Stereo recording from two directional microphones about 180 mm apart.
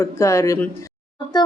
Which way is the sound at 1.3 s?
20° left (ahead or behind).